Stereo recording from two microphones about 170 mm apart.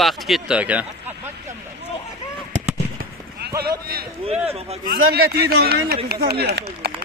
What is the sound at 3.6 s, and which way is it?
Speech, 60° right (ahead or behind).